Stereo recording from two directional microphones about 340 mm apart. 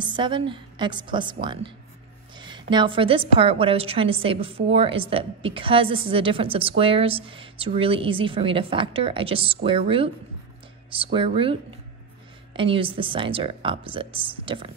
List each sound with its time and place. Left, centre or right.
0.0 s a woman's voice: centre
12.5 s a woman's voice: centre